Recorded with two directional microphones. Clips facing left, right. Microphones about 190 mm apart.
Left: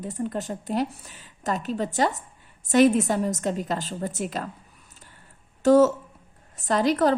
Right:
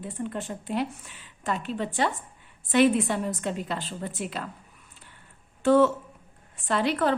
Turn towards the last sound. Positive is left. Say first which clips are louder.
# left 4 dB
turn(degrees=40)  # may be behind; listen again after turning